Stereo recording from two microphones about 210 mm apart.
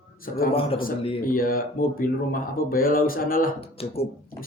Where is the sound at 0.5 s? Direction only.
25° left (ahead or behind).